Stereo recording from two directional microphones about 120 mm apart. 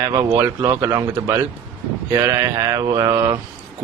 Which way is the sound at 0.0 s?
25° right (ahead or behind).